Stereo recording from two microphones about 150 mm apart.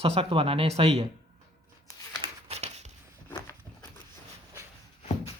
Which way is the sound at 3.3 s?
20° left (ahead or behind).